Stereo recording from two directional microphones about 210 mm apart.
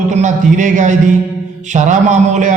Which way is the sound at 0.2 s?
35° right (ahead or behind).